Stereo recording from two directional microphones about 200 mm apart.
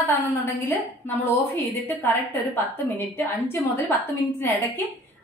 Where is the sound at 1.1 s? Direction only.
10° left (ahead or behind).